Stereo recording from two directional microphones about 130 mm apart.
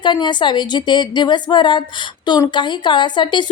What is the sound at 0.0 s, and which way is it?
Speech, 35° left (ahead or behind).